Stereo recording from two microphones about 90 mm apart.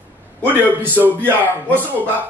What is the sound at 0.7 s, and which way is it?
Speech, 20° right (ahead or behind).